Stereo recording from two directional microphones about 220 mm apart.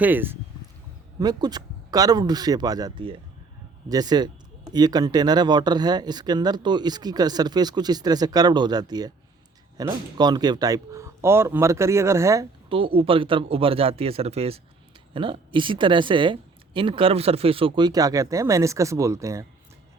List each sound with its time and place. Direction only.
0.0 s speech: 10° right (ahead or behind)